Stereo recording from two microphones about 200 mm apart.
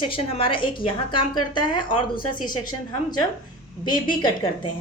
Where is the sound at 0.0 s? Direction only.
30° left (ahead or behind).